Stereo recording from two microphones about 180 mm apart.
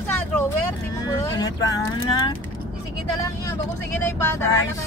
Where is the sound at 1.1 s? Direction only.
20° left (ahead or behind).